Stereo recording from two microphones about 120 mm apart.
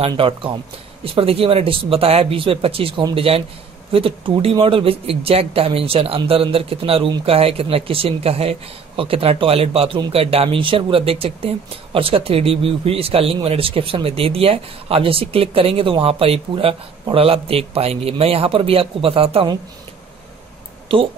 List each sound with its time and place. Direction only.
0.1 s speech: 45° right (ahead or behind)
10.1 s speech: 55° right (ahead or behind)
20.9 s speech: 50° right (ahead or behind)